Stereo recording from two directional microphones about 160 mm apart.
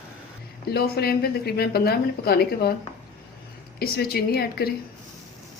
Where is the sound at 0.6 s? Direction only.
75° left (ahead or behind).